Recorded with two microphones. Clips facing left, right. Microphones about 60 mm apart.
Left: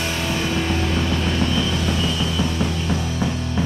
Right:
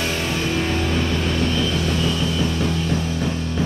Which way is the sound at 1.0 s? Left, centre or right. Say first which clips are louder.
Even; centre.